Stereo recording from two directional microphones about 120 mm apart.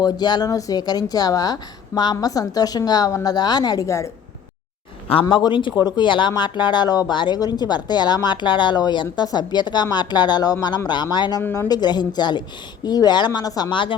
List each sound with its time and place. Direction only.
0.0 s speech: 35° left (ahead or behind)
5.3 s speech: 40° left (ahead or behind)
11.4 s a woman's voice: 15° left (ahead or behind)
11.7 s speech: 35° left (ahead or behind)